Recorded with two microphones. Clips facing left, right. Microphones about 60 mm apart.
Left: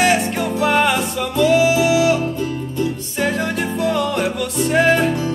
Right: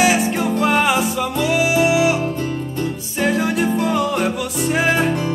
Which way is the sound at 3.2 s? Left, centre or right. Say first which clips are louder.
Right 2 dB; centre.